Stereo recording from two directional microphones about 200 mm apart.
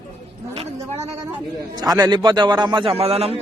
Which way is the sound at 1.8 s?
20° right (ahead or behind).